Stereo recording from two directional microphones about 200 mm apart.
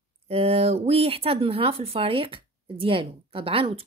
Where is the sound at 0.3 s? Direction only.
30° right (ahead or behind).